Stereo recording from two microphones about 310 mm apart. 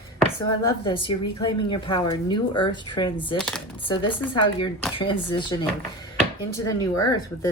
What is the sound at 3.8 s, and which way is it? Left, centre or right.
Speech, centre.